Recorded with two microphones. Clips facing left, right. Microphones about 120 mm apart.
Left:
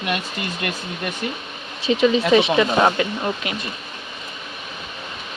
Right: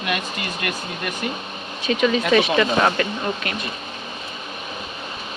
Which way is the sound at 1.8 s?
25° left (ahead or behind).